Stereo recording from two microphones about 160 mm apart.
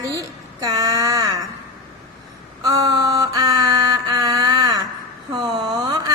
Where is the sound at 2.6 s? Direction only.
25° right (ahead or behind).